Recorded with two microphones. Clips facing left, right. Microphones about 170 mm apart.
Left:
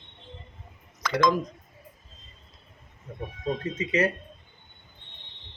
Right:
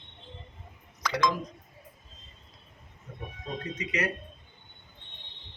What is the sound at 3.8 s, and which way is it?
Speech, 30° left (ahead or behind).